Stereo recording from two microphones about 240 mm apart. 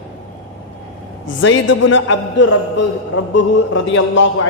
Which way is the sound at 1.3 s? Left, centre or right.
Left.